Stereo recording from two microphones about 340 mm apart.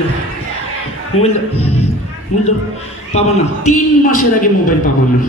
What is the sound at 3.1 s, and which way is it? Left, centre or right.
A man's voice, centre.